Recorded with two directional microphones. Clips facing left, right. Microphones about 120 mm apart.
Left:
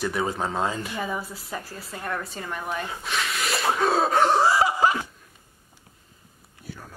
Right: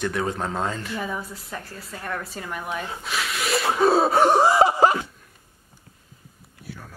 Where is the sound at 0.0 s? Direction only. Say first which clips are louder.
Even; 5° left (ahead or behind).